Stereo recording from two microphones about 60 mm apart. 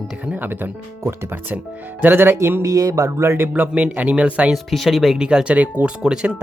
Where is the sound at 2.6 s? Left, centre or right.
Right.